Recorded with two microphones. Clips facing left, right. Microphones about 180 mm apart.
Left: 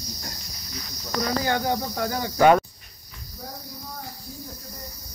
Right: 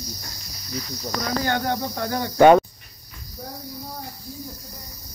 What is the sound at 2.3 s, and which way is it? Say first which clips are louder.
Speech: right 4 dB; 25° right (ahead or behind).